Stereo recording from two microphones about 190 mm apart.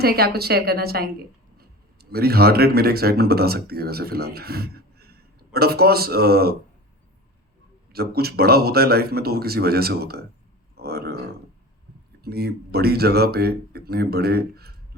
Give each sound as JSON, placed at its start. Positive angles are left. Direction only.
{"t": 0.0, "sound": "speech", "side_deg": -55}
{"t": 7.9, "sound": "speech", "side_deg": -55}
{"t": 10.8, "sound": "a sound", "side_deg": -55}
{"t": 12.2, "sound": "speech", "side_deg": -55}